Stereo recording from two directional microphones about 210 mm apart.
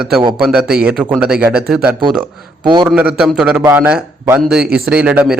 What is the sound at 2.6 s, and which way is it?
Speech, 20° right (ahead or behind).